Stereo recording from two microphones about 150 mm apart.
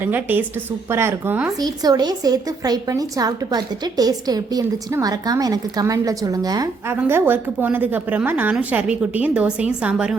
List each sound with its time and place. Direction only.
0.0 s a woman's voice: 10° right (ahead or behind)
1.5 s a woman's voice: 25° right (ahead or behind)
6.9 s a woman's voice: 15° right (ahead or behind)